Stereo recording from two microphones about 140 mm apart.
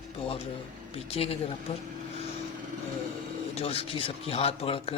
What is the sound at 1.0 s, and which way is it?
Speech, 45° left (ahead or behind).